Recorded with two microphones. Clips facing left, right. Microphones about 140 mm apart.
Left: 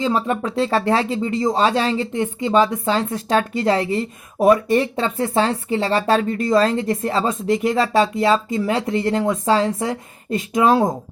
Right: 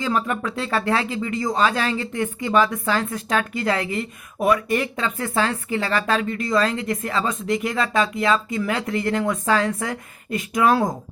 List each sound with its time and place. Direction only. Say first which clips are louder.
0.0 s speech: left 3 dB; 30° left (ahead or behind)